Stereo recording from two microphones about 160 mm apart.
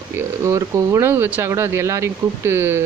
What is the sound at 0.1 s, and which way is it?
Speech, 20° right (ahead or behind).